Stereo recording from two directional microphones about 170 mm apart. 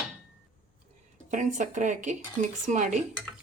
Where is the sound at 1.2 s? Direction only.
45° right (ahead or behind).